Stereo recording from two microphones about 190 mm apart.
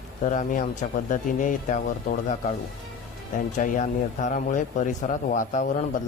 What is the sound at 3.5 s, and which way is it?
Speech, 40° left (ahead or behind).